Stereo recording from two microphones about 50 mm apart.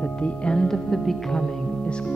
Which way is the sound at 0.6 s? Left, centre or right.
Centre.